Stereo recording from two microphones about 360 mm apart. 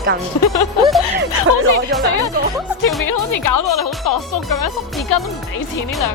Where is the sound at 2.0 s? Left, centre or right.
Left.